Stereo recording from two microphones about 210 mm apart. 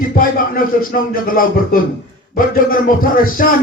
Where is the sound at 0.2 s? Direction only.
40° left (ahead or behind).